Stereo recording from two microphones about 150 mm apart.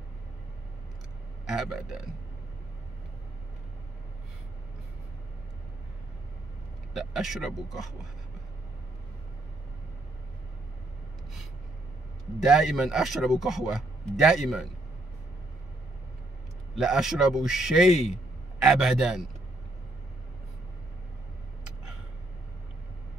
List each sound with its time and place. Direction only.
1.4 s speech: 5° right (ahead or behind)
6.9 s speech: centre (ahead or behind)
12.4 s speech: 5° right (ahead or behind)
16.7 s speech: 5° right (ahead or behind)
17.9 s a man's voice: 45° left (ahead or behind)
18.6 s speech: 5° right (ahead or behind)